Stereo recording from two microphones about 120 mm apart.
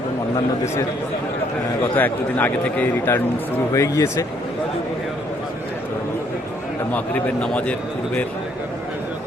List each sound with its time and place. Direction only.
1.8 s a man's voice: 15° left (ahead or behind)
3.8 s speech: 25° left (ahead or behind)
6.9 s a man's voice: 10° left (ahead or behind)